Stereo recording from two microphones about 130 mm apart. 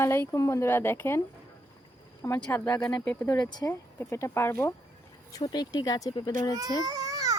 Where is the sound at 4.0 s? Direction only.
20° left (ahead or behind).